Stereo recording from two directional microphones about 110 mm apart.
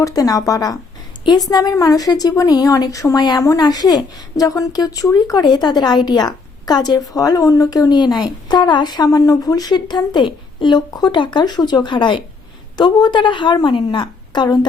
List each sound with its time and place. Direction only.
0.0 s a woman's voice: 35° left (ahead or behind)